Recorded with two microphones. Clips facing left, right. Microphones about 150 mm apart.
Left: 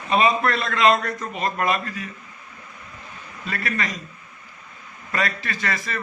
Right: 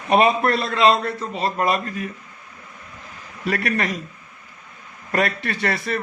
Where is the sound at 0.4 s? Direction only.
35° right (ahead or behind).